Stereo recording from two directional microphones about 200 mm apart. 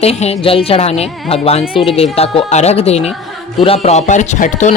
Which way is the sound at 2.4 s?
35° left (ahead or behind).